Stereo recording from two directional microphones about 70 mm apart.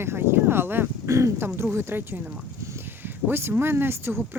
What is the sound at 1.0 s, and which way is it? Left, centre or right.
Speech, right.